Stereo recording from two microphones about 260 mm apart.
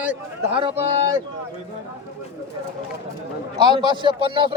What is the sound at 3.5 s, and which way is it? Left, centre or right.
Speech, centre.